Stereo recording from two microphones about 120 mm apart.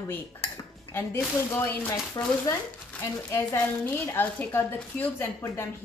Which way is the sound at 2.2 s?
30° left (ahead or behind).